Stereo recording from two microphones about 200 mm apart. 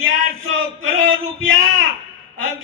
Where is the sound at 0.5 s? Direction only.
80° right.